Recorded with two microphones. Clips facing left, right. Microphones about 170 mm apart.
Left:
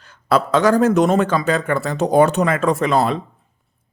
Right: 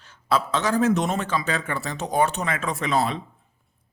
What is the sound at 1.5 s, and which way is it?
Speech, 40° left (ahead or behind).